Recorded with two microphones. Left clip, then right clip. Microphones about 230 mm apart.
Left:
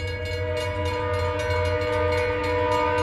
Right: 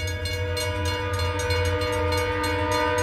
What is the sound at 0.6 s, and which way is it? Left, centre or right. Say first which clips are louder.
Train: right 1 dB; left.